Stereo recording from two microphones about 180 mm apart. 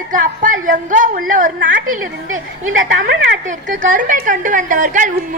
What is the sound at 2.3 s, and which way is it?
Speech, 90° right.